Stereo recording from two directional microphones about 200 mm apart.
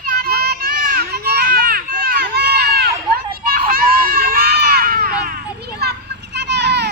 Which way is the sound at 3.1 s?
50° right (ahead or behind).